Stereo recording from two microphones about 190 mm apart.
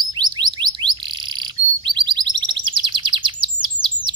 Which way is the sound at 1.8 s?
25° right (ahead or behind).